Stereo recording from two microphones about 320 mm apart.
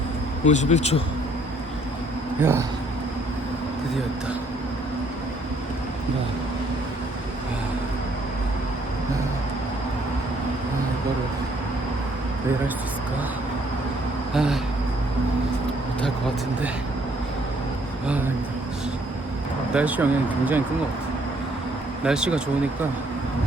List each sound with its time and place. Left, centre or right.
0.4 s speech: left
2.4 s speech: centre
14.3 s speech: centre
19.7 s speech: centre
22.0 s speech: centre